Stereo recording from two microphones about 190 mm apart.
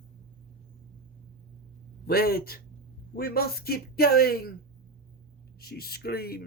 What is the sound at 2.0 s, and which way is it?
Speech, 55° left (ahead or behind).